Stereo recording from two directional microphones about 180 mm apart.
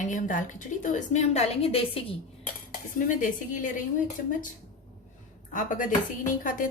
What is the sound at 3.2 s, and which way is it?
Speech, 45° left (ahead or behind).